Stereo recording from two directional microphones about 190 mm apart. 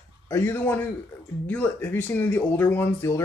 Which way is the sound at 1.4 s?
10° left (ahead or behind).